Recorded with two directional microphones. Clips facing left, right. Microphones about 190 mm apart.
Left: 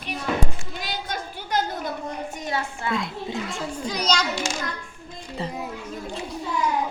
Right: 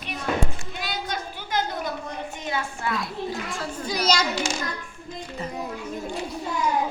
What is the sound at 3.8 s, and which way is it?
Speech, 10° right (ahead or behind).